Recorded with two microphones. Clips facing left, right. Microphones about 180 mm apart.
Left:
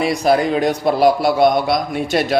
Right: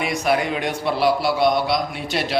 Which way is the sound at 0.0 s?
35° left (ahead or behind).